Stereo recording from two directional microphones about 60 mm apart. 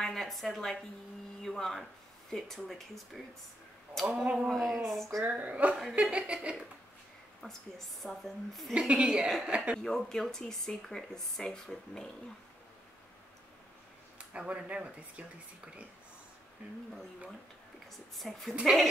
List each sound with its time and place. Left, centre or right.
0.0 s speech: centre
4.0 s a woman's voice: centre
4.5 s speech: centre
5.2 s speech: right
7.4 s a woman's voice: left
8.0 s speech: centre
8.7 s a woman's voice: centre
9.8 s speech: centre
14.3 s speech: centre
18.1 s speech: centre